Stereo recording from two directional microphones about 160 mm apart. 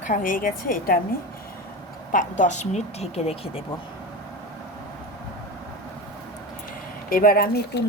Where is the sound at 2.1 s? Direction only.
55° left (ahead or behind).